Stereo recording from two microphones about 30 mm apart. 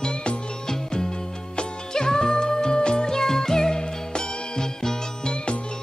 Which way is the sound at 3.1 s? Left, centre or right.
Centre.